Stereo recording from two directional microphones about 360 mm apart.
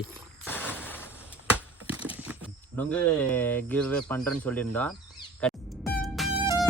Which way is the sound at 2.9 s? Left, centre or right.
Centre.